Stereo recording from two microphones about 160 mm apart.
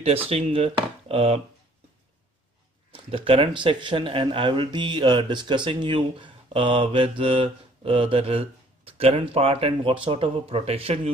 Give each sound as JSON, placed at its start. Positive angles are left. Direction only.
{"t": 0.3, "sound": "speech", "side_deg": -35}
{"t": 1.0, "sound": "a sound", "side_deg": -35}
{"t": 2.9, "sound": "speech", "side_deg": -35}